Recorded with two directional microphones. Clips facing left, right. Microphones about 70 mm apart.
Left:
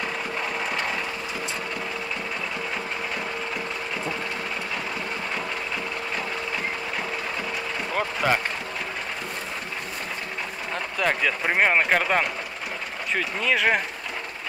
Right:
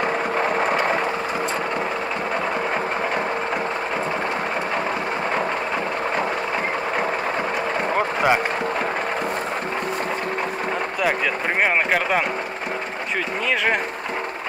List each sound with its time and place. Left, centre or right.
0.0 s vehicle: right
7.9 s a sound: right
11.6 s speech: centre